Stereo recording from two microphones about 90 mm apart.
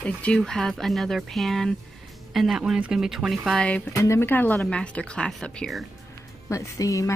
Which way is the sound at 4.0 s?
30° left (ahead or behind).